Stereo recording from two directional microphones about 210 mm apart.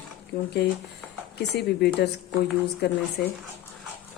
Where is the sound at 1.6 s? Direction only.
50° left (ahead or behind).